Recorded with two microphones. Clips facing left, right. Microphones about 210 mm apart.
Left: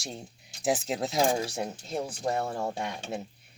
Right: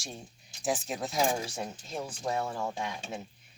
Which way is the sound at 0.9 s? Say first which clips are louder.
Left 3 dB; 35° left (ahead or behind).